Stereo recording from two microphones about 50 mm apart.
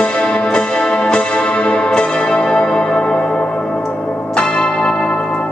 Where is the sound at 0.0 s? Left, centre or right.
Centre.